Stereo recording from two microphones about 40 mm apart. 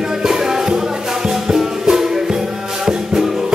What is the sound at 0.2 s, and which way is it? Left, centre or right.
Music, centre.